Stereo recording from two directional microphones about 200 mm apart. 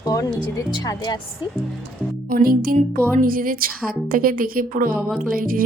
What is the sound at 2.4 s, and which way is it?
Speech, 45° right (ahead or behind).